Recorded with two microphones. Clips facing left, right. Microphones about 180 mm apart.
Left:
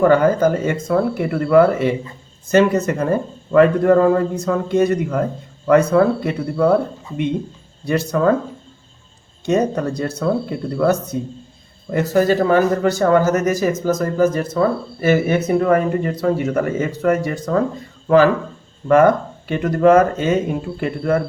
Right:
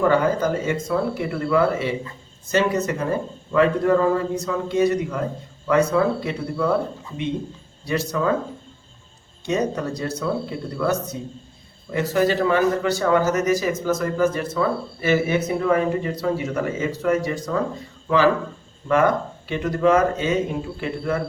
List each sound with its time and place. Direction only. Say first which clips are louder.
0.0 s a man's voice: left 5 dB; 50° left (ahead or behind)
7.9 s a man's voice: left 5 dB; 50° left (ahead or behind)
9.5 s a man's voice: left 5 dB; 50° left (ahead or behind)
18.9 s a man's voice: left 6 dB; 50° left (ahead or behind)